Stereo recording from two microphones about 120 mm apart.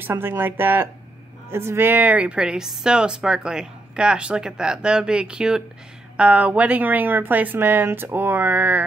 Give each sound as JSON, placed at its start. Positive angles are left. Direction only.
{"t": 0.0, "sound": "speech", "side_deg": -20}